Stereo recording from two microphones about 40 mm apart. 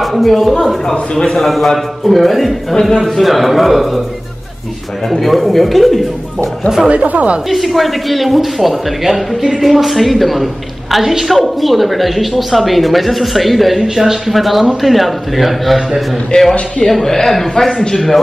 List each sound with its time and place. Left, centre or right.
0.0 s a man's voice: centre
2.7 s speech: centre
3.0 s a man's voice: centre
5.1 s a man's voice: centre
6.9 s speech: right
7.4 s a man's voice: centre
13.8 s speech: centre
14.3 s a man's voice: centre
16.3 s a man's voice: left
16.8 s speech: centre